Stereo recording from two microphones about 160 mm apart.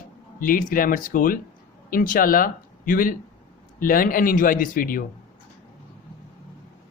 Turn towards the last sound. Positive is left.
turn(degrees=60)  # may be behind; listen again after turning